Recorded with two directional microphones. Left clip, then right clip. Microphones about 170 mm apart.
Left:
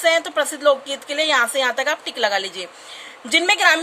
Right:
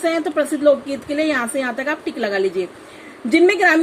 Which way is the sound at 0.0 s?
45° left (ahead or behind).